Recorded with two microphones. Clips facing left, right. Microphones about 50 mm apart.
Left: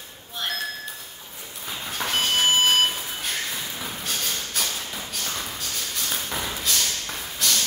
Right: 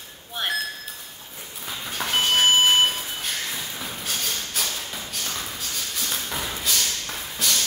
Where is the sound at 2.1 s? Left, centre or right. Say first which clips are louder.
Right 3 dB; centre.